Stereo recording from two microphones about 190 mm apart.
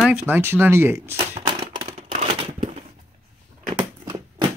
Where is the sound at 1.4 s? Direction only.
35° right (ahead or behind).